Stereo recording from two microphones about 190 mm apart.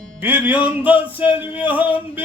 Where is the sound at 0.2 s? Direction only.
10° right (ahead or behind).